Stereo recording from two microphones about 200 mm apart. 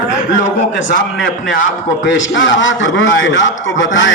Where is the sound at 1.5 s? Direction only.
70° left (ahead or behind).